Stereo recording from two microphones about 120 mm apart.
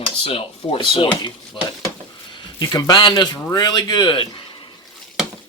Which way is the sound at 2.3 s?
40° left (ahead or behind).